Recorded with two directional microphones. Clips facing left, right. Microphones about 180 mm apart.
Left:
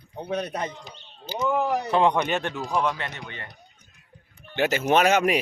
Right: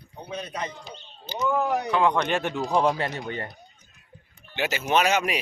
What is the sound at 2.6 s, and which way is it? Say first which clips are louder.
Speech: right 3 dB; 25° right (ahead or behind).